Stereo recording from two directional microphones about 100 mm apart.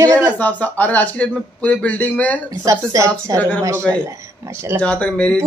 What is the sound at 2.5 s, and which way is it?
A woman's voice, 35° right (ahead or behind).